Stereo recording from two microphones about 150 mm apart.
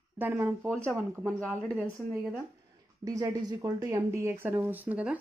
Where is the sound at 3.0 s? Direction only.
25° right (ahead or behind).